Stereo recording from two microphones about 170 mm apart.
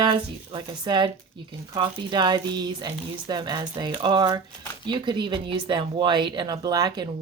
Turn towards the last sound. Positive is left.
turn(degrees=-25)  # may be behind; listen again after turning